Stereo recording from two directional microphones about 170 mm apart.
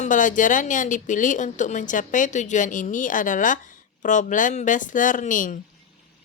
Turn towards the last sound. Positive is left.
turn(degrees=50)  # may be behind; listen again after turning